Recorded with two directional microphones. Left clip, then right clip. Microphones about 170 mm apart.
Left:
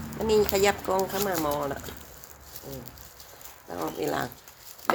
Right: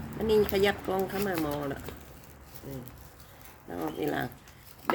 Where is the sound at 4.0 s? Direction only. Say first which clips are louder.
Left 2 dB; 30° right (ahead or behind).